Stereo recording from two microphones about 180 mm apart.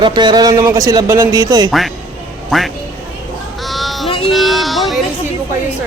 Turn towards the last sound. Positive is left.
turn(degrees=0)  # may be behind; listen again after turning